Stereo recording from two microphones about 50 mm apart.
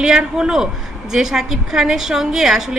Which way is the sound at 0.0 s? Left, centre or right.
Centre.